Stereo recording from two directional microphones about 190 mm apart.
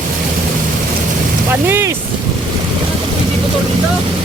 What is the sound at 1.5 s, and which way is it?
Speech, 10° right (ahead or behind).